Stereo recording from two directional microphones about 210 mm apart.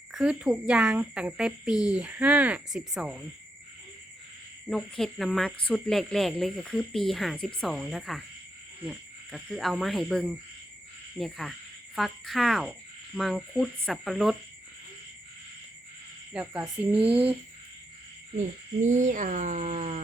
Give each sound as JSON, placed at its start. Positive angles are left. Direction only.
{"t": 0.1, "sound": "cricket", "side_deg": 0}
{"t": 4.7, "sound": "cricket", "side_deg": 0}
{"t": 16.3, "sound": "speech", "side_deg": -5}
{"t": 18.3, "sound": "speech", "side_deg": -35}